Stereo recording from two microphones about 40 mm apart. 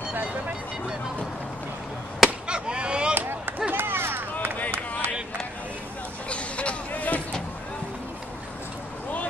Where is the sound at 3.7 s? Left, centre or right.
Right.